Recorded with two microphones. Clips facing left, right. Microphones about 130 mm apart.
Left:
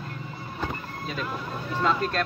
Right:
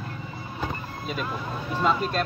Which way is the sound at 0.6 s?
10° right (ahead or behind).